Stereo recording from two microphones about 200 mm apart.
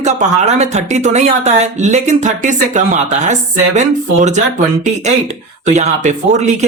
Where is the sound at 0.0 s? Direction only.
35° right (ahead or behind).